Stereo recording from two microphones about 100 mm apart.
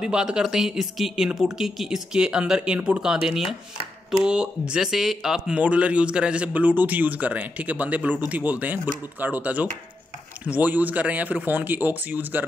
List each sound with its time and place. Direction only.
0.0 s speech: 10° right (ahead or behind)